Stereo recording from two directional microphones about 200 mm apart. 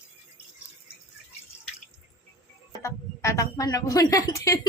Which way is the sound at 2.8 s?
15° left (ahead or behind).